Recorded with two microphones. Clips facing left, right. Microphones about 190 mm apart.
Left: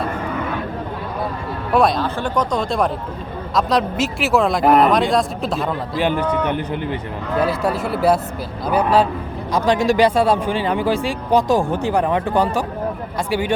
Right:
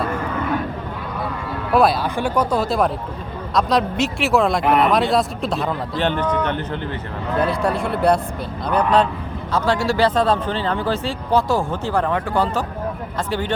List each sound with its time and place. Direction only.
1.7 s a man's voice: 5° right (ahead or behind); by 12.6 s 15° left (ahead or behind)